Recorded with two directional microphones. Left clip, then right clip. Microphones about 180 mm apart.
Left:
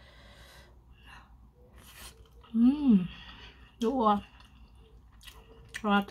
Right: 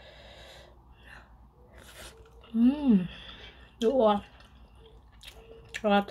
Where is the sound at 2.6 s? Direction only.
25° left (ahead or behind).